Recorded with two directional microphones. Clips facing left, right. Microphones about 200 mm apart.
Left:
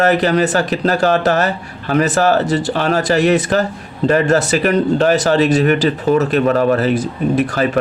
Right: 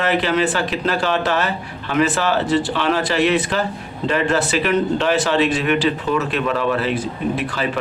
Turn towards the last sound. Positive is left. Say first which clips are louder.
# left 6 dB
turn(degrees=45)  # may be behind; listen again after turning